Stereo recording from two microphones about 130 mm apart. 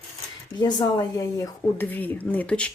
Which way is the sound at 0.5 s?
30° left (ahead or behind).